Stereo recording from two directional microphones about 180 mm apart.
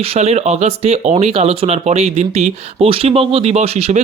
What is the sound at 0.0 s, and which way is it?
Speech, 35° right (ahead or behind).